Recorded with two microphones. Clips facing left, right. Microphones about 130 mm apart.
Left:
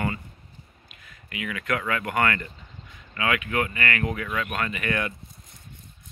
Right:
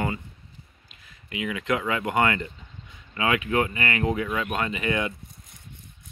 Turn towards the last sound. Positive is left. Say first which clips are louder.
# right 2 dB
turn(degrees=-20)  # may be behind; listen again after turning